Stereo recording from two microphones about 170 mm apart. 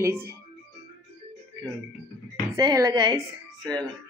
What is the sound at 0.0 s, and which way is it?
Speech, 15° right (ahead or behind).